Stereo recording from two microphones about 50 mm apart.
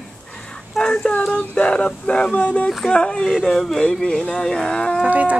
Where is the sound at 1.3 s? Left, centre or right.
Left.